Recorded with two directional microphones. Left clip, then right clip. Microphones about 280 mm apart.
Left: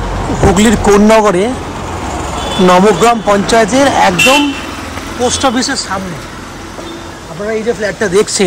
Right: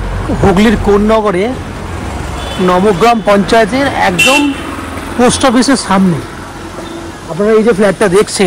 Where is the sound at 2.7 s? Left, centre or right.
Centre.